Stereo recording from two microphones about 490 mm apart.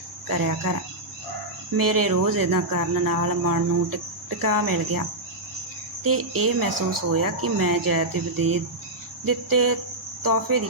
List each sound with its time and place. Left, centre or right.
0.3 s speech: right
1.7 s speech: right
10.5 s speech: right